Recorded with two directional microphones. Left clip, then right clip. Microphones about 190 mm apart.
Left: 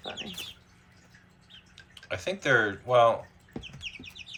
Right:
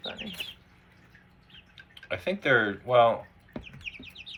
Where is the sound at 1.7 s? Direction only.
10° left (ahead or behind).